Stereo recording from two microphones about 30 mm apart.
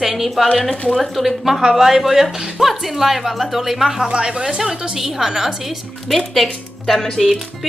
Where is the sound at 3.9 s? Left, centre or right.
Right.